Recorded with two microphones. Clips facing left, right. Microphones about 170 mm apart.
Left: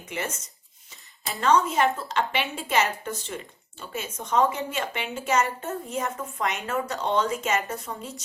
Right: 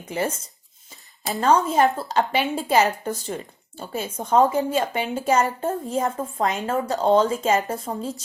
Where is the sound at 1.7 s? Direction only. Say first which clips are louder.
Right 4 dB; 35° right (ahead or behind).